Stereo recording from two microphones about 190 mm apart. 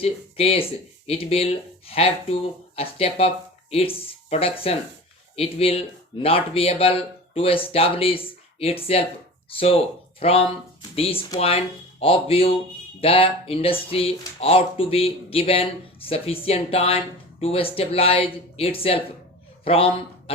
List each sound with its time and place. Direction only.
0.0 s a man's voice: 30° left (ahead or behind)